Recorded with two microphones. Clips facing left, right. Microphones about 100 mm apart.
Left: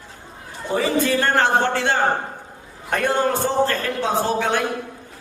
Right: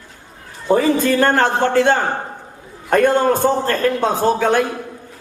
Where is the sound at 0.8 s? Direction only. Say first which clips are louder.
Right 2 dB; 45° right (ahead or behind).